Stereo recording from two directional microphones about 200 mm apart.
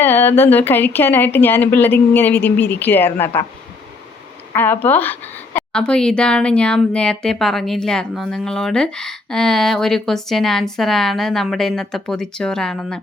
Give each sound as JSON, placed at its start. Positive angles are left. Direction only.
{"t": 0.0, "sound": "speech", "side_deg": 10}
{"t": 4.5, "sound": "speech", "side_deg": 10}